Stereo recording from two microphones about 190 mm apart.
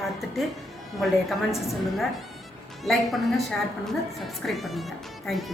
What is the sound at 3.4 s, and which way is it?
Speech, centre (ahead or behind).